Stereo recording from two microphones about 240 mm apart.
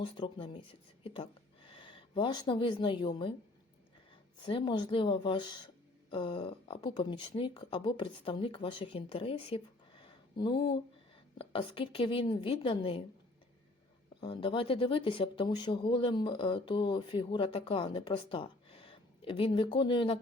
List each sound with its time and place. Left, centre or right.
0.0 s speech: left
4.4 s speech: centre
14.2 s speech: left